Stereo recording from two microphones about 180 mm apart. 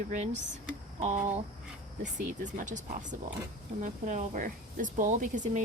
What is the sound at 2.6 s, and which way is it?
Speech, 45° right (ahead or behind).